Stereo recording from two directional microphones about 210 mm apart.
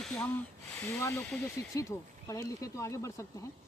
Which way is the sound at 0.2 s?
10° left (ahead or behind).